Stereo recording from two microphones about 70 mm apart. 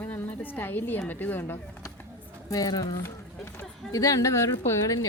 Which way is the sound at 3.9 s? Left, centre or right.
Left.